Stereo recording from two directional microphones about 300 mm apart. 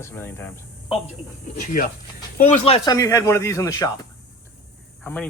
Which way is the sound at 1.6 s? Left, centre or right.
Left.